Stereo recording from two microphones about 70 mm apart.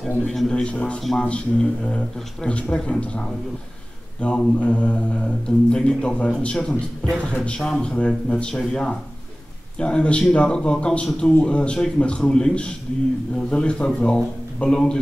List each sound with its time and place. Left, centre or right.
0.3 s a man's voice: centre
0.7 s speech: centre